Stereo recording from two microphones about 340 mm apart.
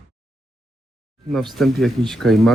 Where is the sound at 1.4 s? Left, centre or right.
Centre.